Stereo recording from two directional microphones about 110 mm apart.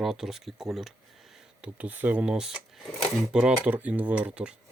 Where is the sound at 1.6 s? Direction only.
15° right (ahead or behind).